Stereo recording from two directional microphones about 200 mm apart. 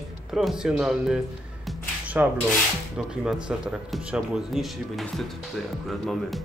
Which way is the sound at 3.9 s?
Centre (ahead or behind).